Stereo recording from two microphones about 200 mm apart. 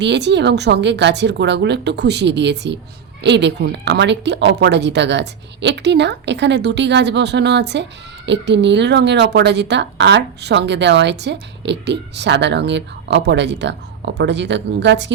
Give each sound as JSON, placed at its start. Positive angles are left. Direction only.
{"t": 0.0, "sound": "speech", "side_deg": -60}